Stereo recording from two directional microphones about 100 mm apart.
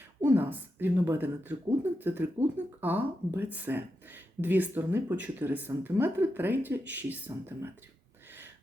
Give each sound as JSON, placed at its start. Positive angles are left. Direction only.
{"t": 0.2, "sound": "speech", "side_deg": -20}